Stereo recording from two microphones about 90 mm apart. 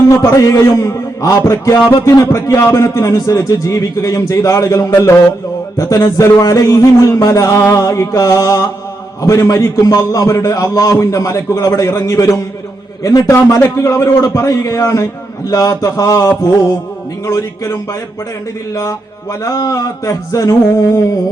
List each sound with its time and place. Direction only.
0.2 s a man's voice: 40° left (ahead or behind)